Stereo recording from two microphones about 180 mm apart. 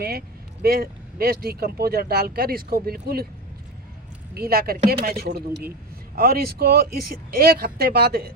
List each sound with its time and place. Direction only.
0.0 s speech: 55° right (ahead or behind)
4.4 s speech: 55° right (ahead or behind)